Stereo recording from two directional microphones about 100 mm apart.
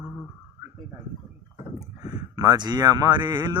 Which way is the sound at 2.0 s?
40° right (ahead or behind).